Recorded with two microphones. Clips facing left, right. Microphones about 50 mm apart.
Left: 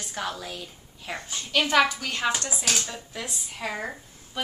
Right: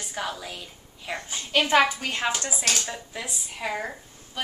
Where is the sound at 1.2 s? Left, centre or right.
Right.